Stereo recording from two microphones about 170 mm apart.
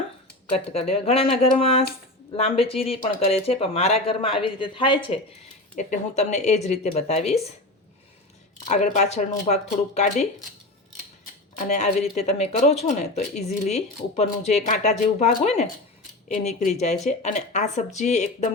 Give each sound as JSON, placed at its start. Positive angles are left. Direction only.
{"t": 0.7, "sound": "speech", "side_deg": 35}
{"t": 5.7, "sound": "speech", "side_deg": 45}
{"t": 8.6, "sound": "speech", "side_deg": 45}
{"t": 11.5, "sound": "speech", "side_deg": 45}